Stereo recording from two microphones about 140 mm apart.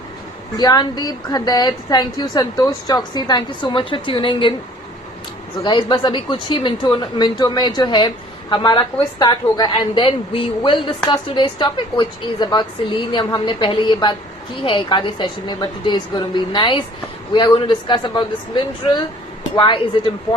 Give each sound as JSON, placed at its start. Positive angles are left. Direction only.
{"t": 0.5, "sound": "a woman's voice", "side_deg": 30}
{"t": 5.6, "sound": "a woman's voice", "side_deg": 35}